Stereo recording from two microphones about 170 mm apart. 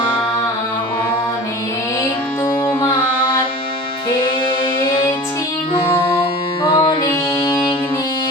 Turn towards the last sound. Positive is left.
turn(degrees=20)  # may be behind; listen again after turning